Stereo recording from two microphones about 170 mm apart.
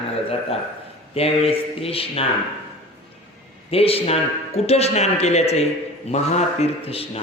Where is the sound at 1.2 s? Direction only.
35° left (ahead or behind).